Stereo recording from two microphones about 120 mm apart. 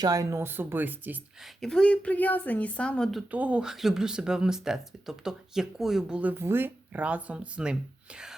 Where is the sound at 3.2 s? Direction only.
10° right (ahead or behind).